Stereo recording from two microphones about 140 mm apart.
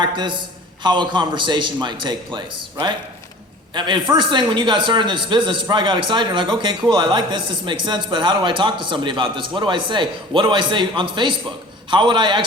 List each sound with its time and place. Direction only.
0.0 s speech: 35° right (ahead or behind)